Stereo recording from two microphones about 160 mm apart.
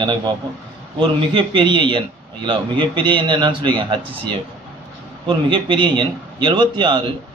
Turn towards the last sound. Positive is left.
turn(degrees=-30)  # may be behind; listen again after turning